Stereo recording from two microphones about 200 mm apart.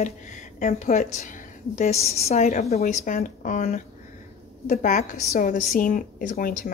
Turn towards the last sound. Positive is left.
turn(degrees=45)  # may be behind; listen again after turning